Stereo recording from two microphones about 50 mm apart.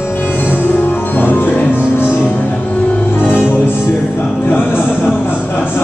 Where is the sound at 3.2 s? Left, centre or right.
Left.